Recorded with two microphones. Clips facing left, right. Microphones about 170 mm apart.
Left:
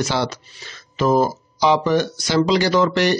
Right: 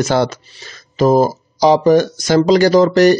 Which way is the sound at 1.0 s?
40° right (ahead or behind).